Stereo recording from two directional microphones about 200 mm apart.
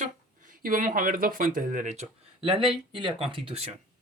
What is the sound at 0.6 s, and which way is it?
Speech, 45° right (ahead or behind).